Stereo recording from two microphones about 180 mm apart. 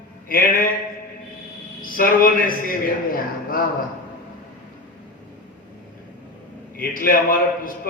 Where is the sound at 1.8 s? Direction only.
50° left (ahead or behind).